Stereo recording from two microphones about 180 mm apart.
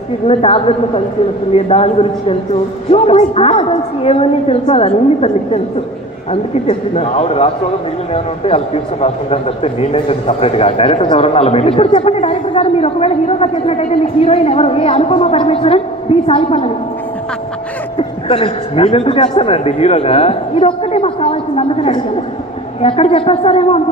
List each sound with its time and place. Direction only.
0.3 s a man's voice: 35° left (ahead or behind)
17.9 s a man's voice: 30° left (ahead or behind)